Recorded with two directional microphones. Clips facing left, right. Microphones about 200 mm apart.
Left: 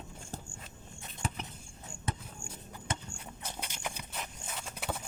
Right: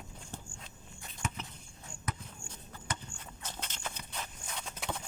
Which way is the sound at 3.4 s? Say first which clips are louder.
Left 2 dB; 10° left (ahead or behind).